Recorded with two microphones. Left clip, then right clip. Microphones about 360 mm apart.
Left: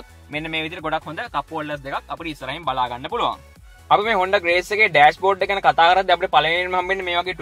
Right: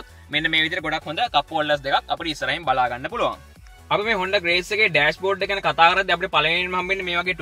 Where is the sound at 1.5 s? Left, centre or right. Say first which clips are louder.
Right 6 dB; centre.